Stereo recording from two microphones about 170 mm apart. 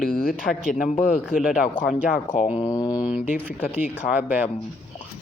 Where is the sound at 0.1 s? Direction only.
60° left (ahead or behind).